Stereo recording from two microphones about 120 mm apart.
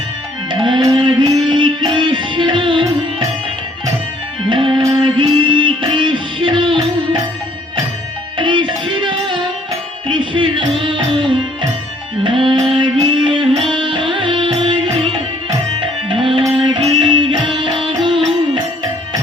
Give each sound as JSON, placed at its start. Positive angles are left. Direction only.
{"t": 0.5, "sound": "music", "side_deg": -40}
{"t": 4.4, "sound": "music", "side_deg": -45}
{"t": 8.4, "sound": "music", "side_deg": -45}